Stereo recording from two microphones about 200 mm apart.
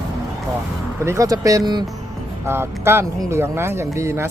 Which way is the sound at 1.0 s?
15° right (ahead or behind).